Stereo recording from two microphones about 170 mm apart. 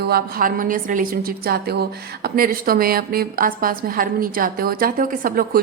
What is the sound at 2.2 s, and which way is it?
A woman's voice, 60° right (ahead or behind).